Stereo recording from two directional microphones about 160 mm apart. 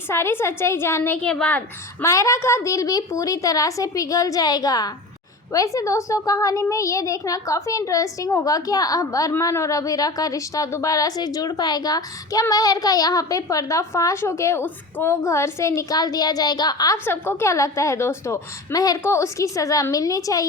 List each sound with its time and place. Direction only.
0.1 s a child's voice: 15° left (ahead or behind)